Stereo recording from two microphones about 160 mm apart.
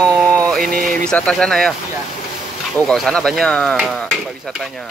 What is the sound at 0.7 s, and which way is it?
Speech, 65° right (ahead or behind).